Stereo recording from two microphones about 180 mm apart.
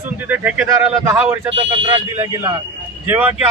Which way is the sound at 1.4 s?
30° right (ahead or behind).